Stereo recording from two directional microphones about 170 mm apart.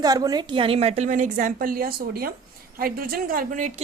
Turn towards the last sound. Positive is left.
turn(degrees=-50)  # may be behind; listen again after turning